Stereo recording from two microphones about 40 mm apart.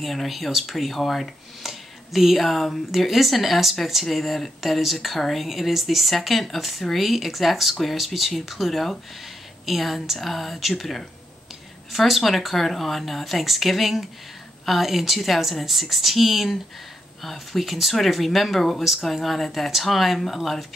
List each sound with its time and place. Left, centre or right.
0.0 s speech: centre